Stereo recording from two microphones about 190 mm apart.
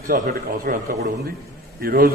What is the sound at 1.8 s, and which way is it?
Speech, 50° right (ahead or behind).